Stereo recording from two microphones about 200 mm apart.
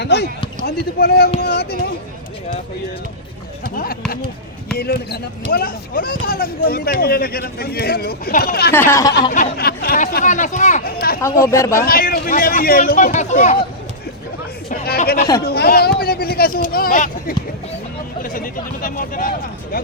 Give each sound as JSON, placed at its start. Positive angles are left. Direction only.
{"t": 0.0, "sound": "a sound", "side_deg": 55}
{"t": 0.6, "sound": "speech", "side_deg": 50}
{"t": 4.8, "sound": "speech", "side_deg": 50}
{"t": 8.7, "sound": "speech", "side_deg": 10}
{"t": 9.3, "sound": "speech", "side_deg": 45}
{"t": 10.9, "sound": "speech", "side_deg": 50}
{"t": 11.4, "sound": "speech", "side_deg": 15}
{"t": 11.7, "sound": "speech", "side_deg": 45}
{"t": 14.7, "sound": "chatter", "side_deg": 50}
{"t": 15.4, "sound": "speech", "side_deg": 50}